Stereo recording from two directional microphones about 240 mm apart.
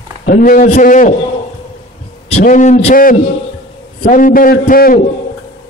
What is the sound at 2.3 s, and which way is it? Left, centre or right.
A man's voice, left.